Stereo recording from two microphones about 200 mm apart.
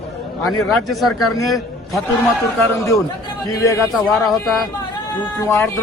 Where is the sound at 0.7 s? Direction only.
Centre (ahead or behind).